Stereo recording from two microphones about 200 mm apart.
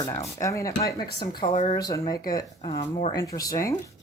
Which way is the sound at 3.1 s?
15° left (ahead or behind).